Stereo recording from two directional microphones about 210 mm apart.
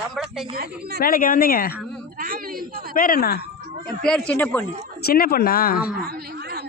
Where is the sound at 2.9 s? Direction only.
40° left (ahead or behind).